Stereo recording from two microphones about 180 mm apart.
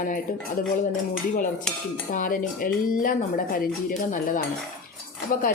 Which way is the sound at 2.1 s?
50° left (ahead or behind).